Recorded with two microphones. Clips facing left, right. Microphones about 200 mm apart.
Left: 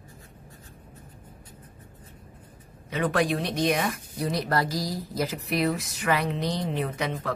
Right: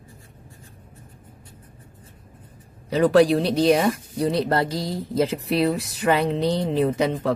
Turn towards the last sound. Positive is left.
turn(degrees=-30)  # may be behind; listen again after turning